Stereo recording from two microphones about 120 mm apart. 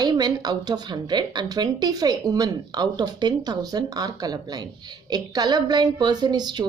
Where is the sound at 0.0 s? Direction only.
35° right (ahead or behind).